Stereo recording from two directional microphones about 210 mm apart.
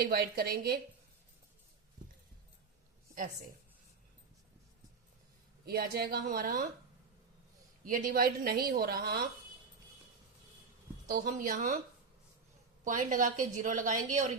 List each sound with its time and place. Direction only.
0.0 s a woman's voice: 45° right (ahead or behind)
5.6 s a woman's voice: 50° right (ahead or behind)
7.9 s a woman's voice: 40° right (ahead or behind)
11.1 s a woman's voice: 40° right (ahead or behind)
12.8 s a woman's voice: 40° right (ahead or behind)